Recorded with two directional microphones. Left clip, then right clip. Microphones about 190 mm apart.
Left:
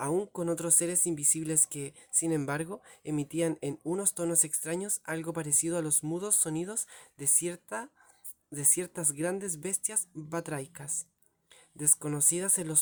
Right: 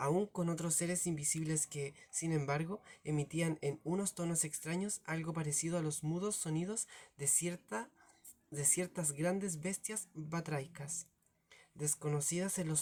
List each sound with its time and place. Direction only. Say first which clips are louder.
0.0 s a sound: left 4 dB; 40° left (ahead or behind)
0.6 s speech: left 8 dB; 40° left (ahead or behind)
11.9 s speech: left 8 dB; 35° left (ahead or behind)